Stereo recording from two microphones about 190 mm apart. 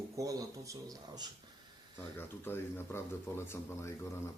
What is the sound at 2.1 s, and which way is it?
Speech, 10° left (ahead or behind).